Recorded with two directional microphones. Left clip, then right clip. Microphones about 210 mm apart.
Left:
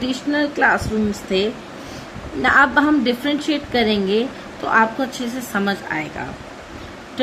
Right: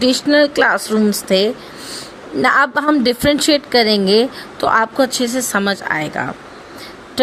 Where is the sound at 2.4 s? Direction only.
55° right (ahead or behind).